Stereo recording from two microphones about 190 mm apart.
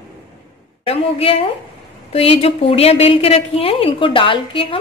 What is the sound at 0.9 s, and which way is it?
A woman's voice, 30° left (ahead or behind).